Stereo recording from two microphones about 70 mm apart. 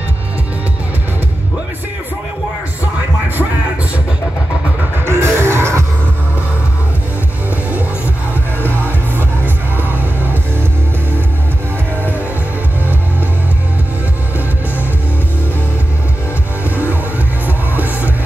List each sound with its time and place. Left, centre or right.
5.0 s music: right
17.7 s music: right